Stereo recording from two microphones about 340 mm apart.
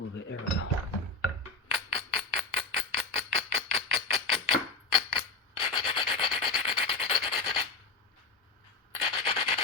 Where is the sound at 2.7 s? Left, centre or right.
Centre.